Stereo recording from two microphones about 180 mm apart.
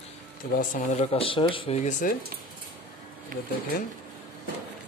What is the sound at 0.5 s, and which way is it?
Speech, 50° left (ahead or behind).